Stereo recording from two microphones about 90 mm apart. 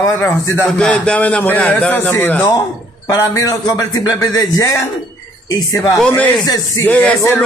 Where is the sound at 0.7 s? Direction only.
10° left (ahead or behind).